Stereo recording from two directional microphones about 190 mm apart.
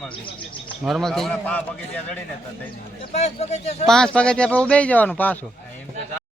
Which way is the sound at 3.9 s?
5° left (ahead or behind).